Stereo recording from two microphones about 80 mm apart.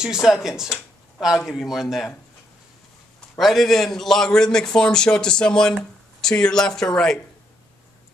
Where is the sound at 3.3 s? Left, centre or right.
Centre.